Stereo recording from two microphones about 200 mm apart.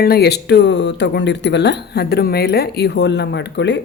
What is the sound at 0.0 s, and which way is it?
Speech, 50° left (ahead or behind).